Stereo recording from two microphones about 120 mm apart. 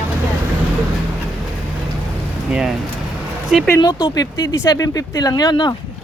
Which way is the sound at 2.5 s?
5° right (ahead or behind).